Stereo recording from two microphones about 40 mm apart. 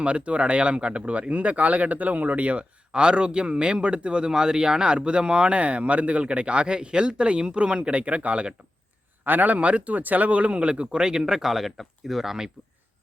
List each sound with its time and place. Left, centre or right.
0.0 s speech: right
2.9 s speech: right
9.2 s speech: right
9.6 s speech: right; by 12.5 s centre